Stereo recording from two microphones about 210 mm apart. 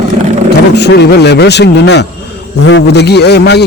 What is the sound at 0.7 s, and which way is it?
A man's voice, 55° left (ahead or behind).